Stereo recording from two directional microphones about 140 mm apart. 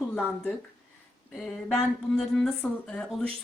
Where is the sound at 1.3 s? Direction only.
5° left (ahead or behind).